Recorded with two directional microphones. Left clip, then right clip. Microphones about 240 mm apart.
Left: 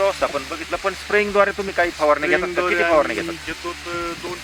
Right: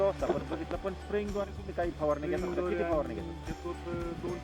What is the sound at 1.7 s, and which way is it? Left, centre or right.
Speech, centre.